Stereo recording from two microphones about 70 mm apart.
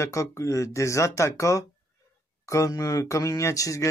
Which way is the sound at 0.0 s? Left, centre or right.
Left.